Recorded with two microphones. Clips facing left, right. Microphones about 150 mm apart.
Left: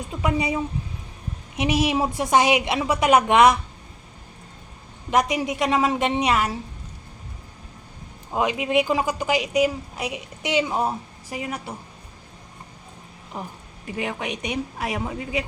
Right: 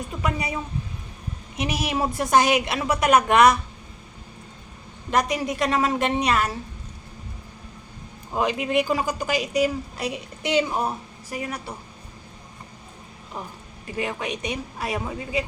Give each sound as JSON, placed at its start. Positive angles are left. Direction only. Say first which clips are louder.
{"t": 0.0, "sound": "a woman's voice", "louder": "left 3 dB", "side_deg": 20}
{"t": 5.1, "sound": "speech", "louder": "left 1 dB", "side_deg": 15}
{"t": 8.4, "sound": "speech", "louder": "left 1 dB", "side_deg": 15}
{"t": 13.9, "sound": "speech", "louder": "even", "side_deg": 15}